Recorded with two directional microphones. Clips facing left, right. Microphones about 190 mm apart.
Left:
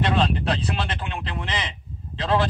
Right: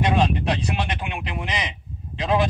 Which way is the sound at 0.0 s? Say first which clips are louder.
Right 2 dB; 15° right (ahead or behind).